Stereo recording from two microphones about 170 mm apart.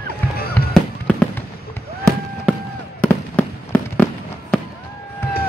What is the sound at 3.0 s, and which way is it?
Fireworks, 10° left (ahead or behind).